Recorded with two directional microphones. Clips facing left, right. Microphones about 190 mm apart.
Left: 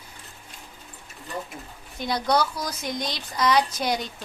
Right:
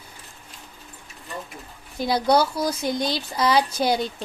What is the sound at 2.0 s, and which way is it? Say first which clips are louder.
Speech: right 4 dB; 30° right (ahead or behind).